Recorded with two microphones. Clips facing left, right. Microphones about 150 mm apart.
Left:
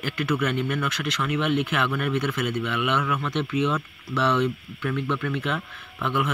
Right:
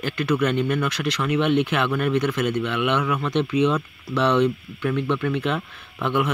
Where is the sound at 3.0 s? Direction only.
15° right (ahead or behind).